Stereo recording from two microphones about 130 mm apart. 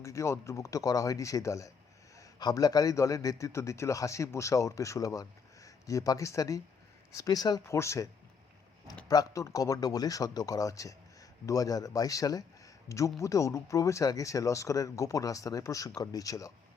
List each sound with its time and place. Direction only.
0.0 s a man's voice: 25° left (ahead or behind)
9.0 s a man's voice: 25° left (ahead or behind)